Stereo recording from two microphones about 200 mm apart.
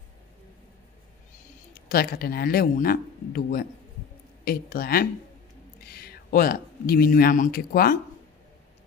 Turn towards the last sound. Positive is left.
turn(degrees=50)  # may be behind; listen again after turning